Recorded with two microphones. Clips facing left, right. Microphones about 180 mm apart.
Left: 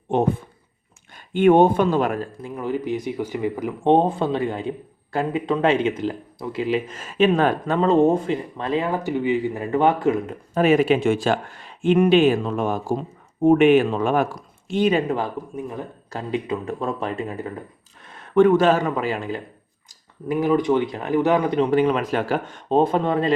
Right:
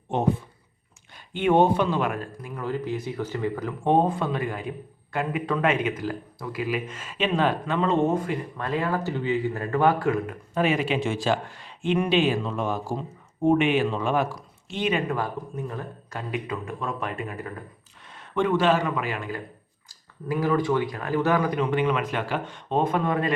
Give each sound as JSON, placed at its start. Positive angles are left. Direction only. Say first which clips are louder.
{"t": 1.1, "sound": "speech", "louder": "left 6 dB", "side_deg": 50}
{"t": 2.4, "sound": "speech", "louder": "left 4 dB", "side_deg": 15}
{"t": 3.9, "sound": "speech", "louder": "left 3 dB", "side_deg": 25}
{"t": 10.5, "sound": "speech", "louder": "left 7 dB", "side_deg": 45}
{"t": 15.1, "sound": "speech", "louder": "left 3 dB", "side_deg": 20}
{"t": 16.0, "sound": "speech", "louder": "left 6 dB", "side_deg": 30}
{"t": 18.0, "sound": "a man's voice", "louder": "left 10 dB", "side_deg": 50}
{"t": 19.9, "sound": "speech", "louder": "left 4 dB", "side_deg": 20}
{"t": 22.8, "sound": "speech", "louder": "left 4 dB", "side_deg": 30}